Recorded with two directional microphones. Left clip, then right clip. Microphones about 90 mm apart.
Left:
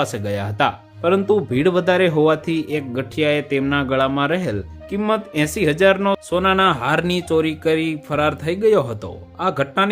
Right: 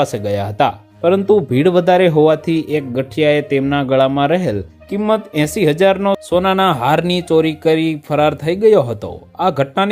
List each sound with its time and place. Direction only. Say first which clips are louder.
0.0 s speech: right 5 dB; 35° right (ahead or behind)